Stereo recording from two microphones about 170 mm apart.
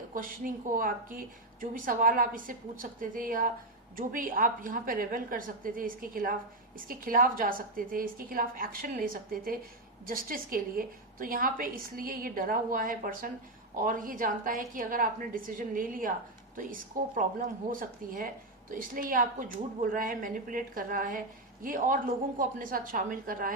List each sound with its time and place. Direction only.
0.1 s a woman's voice: 55° right (ahead or behind)